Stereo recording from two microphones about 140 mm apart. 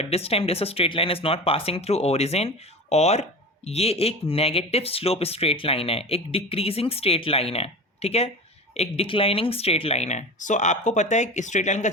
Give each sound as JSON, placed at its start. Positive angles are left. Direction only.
{"t": 0.0, "sound": "speech", "side_deg": 45}